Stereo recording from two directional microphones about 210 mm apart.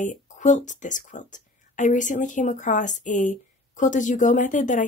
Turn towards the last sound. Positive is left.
turn(degrees=35)  # may be behind; listen again after turning